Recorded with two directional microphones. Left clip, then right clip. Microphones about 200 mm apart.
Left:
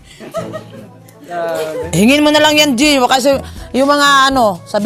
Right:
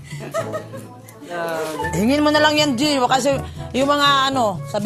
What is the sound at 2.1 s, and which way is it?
Speech, 35° left (ahead or behind).